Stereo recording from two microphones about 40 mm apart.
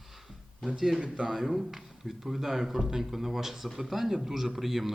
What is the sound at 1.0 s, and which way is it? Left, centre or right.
Speech, right.